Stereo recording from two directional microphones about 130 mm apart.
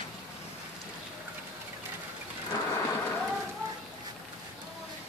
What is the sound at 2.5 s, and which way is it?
Thunder, 20° left (ahead or behind).